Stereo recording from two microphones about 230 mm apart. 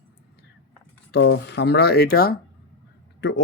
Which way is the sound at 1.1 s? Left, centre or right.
Left.